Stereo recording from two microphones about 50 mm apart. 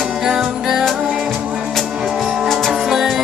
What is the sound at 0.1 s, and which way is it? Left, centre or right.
Music, centre.